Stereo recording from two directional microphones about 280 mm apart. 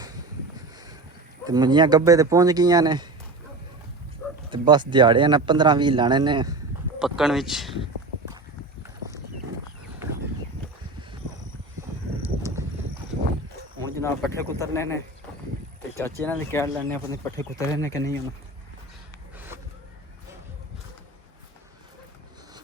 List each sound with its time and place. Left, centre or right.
1.5 s speech: centre
4.4 s speech: centre
7.0 s speech: centre
13.8 s speech: centre